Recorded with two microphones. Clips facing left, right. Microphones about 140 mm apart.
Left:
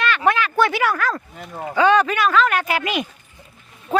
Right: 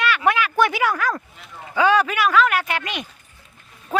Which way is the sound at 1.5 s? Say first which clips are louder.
Left 13 dB; 50° left (ahead or behind).